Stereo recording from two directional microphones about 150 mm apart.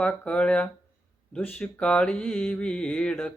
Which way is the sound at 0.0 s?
5° left (ahead or behind).